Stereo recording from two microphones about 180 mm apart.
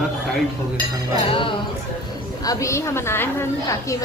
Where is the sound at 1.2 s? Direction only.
30° left (ahead or behind).